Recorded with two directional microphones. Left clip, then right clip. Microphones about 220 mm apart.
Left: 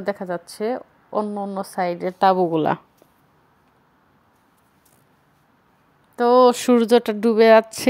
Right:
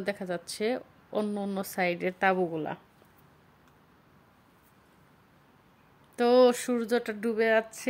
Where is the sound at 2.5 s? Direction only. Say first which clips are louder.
Left 14 dB; 45° left (ahead or behind).